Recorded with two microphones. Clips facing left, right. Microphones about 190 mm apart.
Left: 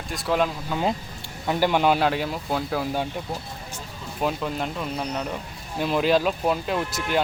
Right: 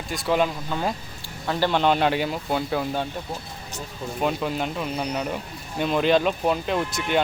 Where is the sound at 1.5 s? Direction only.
15° left (ahead or behind).